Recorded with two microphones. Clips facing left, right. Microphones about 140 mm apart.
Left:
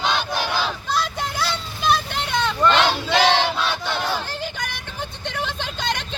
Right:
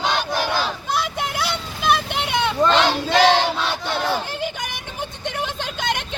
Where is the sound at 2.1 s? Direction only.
15° right (ahead or behind).